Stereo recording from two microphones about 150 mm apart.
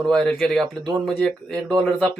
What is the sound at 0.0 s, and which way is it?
Speech, 5° left (ahead or behind).